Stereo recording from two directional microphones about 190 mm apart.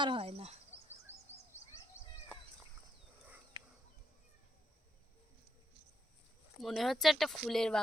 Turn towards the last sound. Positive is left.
turn(degrees=5)  # may be behind; listen again after turning